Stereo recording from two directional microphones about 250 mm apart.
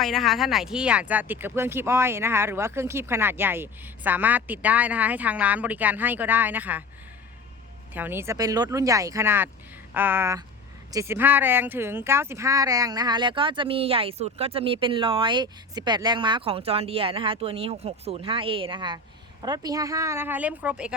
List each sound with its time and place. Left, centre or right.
0.0 s speech: centre
7.9 s speech: centre